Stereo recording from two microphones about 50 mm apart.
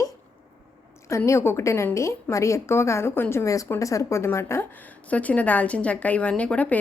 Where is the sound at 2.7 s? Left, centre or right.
Left.